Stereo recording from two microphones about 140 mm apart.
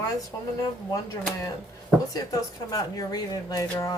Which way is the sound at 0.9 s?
25° left (ahead or behind).